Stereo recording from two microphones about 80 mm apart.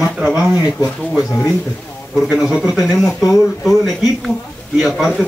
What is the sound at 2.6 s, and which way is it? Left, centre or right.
Speech, centre.